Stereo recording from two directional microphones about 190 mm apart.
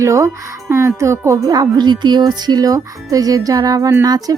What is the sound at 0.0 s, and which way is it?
Speech, 15° right (ahead or behind).